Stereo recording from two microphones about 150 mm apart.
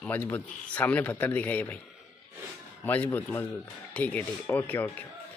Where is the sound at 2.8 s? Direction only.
10° left (ahead or behind).